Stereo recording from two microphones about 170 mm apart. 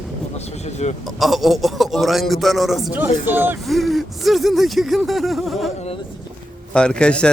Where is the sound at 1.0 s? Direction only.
Centre (ahead or behind).